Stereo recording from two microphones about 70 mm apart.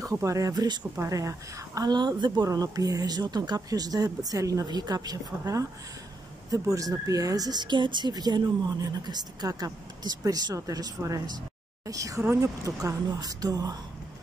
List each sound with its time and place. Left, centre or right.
0.0 s a woman's voice: right
0.9 s speech: right
1.8 s a woman's voice: right
4.6 s a woman's voice: right
9.5 s a woman's voice: right
11.8 s a woman's voice: right